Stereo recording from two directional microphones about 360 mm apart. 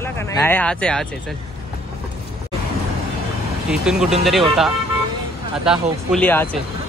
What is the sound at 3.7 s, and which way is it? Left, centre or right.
Speech, centre.